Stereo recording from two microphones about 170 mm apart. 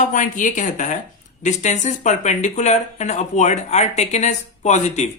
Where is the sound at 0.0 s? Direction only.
50° left (ahead or behind).